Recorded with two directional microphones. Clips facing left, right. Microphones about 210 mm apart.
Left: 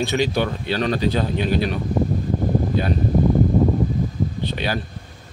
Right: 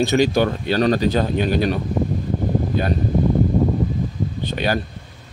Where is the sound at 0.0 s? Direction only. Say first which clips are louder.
Right 4 dB; 45° right (ahead or behind).